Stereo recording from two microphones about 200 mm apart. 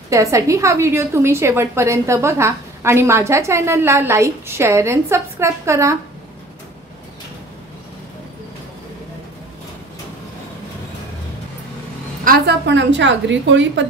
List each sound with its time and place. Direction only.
0.1 s a woman's voice: 15° right (ahead or behind)
12.3 s a woman's voice: 60° right (ahead or behind)